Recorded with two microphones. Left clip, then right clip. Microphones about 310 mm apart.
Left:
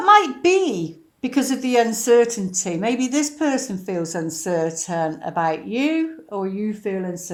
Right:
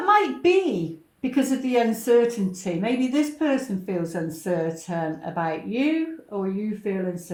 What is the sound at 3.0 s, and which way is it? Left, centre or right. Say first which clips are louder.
Speech: left 2 dB; left.